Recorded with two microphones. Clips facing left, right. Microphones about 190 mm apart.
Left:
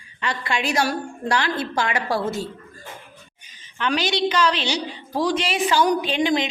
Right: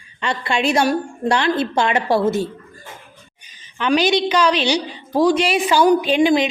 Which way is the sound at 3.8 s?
15° right (ahead or behind).